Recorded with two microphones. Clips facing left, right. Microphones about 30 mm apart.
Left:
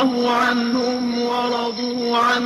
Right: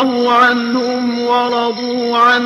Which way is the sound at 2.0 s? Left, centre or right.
Right.